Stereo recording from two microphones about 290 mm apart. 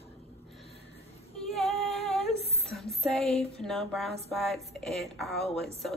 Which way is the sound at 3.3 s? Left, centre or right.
Left.